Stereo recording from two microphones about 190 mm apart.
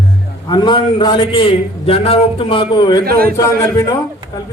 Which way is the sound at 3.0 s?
50° right (ahead or behind).